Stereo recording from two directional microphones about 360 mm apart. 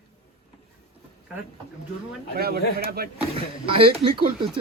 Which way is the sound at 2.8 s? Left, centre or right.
Right.